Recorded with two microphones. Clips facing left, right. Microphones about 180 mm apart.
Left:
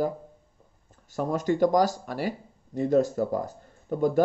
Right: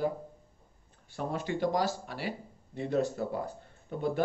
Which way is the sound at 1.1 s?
45° left (ahead or behind).